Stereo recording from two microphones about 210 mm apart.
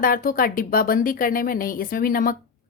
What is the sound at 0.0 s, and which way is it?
A woman's voice, 40° left (ahead or behind).